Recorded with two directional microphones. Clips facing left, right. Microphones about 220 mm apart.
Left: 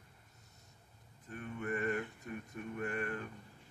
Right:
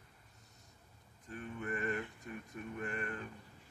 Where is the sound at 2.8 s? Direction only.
5° left (ahead or behind).